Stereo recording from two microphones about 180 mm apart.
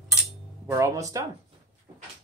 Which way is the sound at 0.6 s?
15° right (ahead or behind).